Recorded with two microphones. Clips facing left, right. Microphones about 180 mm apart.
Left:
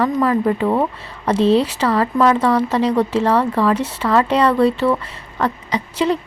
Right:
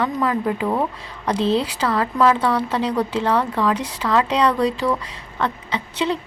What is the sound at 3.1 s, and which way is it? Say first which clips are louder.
Speech: left 4 dB; 10° left (ahead or behind).